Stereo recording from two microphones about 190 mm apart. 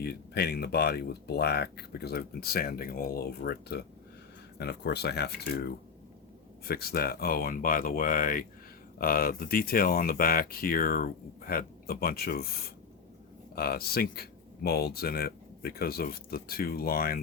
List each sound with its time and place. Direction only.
0.0 s speech: 55° left (ahead or behind)
13.6 s speech: 55° left (ahead or behind)